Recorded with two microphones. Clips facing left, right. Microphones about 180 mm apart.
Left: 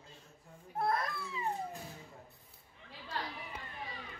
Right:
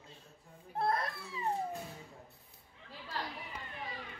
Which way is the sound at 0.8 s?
30° right (ahead or behind).